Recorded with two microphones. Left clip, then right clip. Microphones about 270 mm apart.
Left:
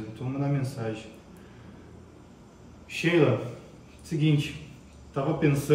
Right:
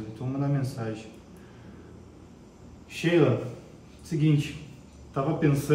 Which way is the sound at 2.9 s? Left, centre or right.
Centre.